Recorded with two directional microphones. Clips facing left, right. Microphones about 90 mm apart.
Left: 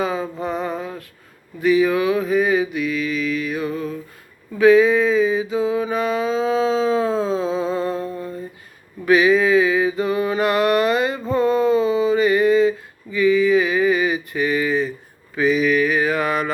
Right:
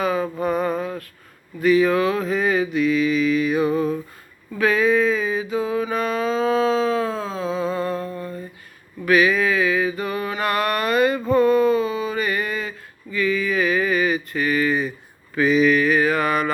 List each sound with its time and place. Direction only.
0.0 s mantra: 20° left (ahead or behind)
2.8 s mantra: centre (ahead or behind)
4.5 s mantra: 20° left (ahead or behind)
11.3 s a sound: 25° left (ahead or behind)
14.7 s a sound: 5° right (ahead or behind)
15.4 s mantra: 10° left (ahead or behind)